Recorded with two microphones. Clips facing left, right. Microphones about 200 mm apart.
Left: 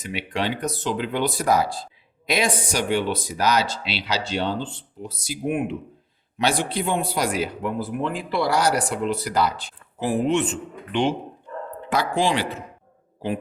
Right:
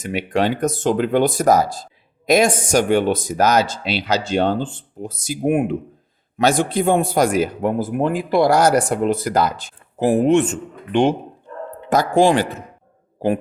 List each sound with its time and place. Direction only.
0.0 s speech: 45° right (ahead or behind)